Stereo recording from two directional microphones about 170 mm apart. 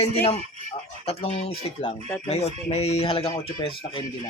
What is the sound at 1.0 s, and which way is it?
Speech, 35° left (ahead or behind).